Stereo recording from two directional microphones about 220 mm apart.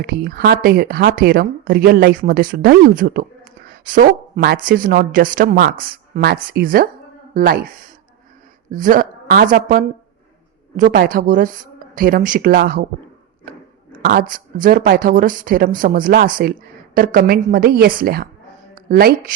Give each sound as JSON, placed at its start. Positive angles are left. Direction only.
{"t": 0.0, "sound": "speech", "side_deg": -45}
{"t": 14.0, "sound": "speech", "side_deg": -40}